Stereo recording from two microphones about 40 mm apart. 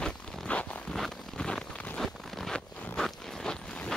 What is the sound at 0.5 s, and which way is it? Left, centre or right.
Zipper, left.